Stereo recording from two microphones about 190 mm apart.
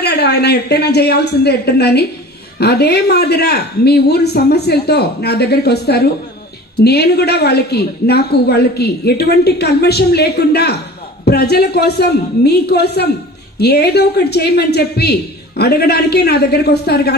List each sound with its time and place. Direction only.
0.0 s a woman's voice: 60° left (ahead or behind)